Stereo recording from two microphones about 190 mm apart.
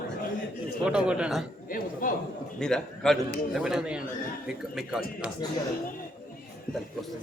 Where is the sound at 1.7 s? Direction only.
45° left (ahead or behind).